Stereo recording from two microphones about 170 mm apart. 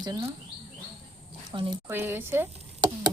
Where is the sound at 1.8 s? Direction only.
15° right (ahead or behind).